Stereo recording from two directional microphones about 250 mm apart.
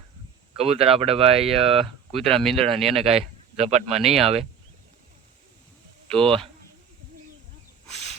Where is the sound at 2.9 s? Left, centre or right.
Right.